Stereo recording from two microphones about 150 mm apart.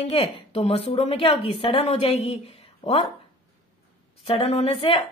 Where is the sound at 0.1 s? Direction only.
40° left (ahead or behind).